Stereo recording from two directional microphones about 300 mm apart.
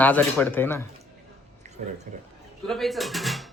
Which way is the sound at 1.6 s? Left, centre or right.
Right.